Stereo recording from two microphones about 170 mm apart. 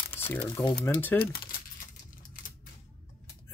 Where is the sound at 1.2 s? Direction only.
65° left (ahead or behind).